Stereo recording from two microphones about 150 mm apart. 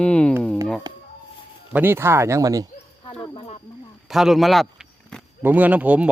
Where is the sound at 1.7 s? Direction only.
15° right (ahead or behind).